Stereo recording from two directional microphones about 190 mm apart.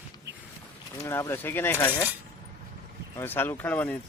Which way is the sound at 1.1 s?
15° left (ahead or behind).